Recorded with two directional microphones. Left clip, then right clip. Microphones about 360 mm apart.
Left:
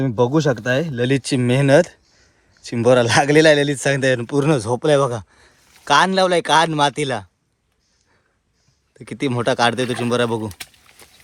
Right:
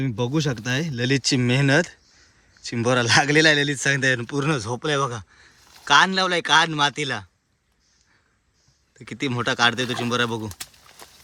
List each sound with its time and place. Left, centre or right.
0.0 s speech: centre
9.0 s speech: centre